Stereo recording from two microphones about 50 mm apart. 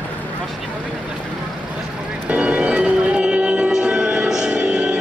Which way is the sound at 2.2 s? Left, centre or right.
Right.